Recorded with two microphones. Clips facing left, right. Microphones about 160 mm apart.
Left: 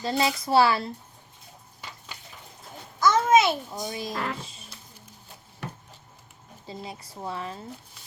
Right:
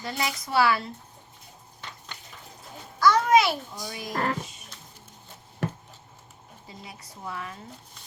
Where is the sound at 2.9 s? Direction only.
20° left (ahead or behind).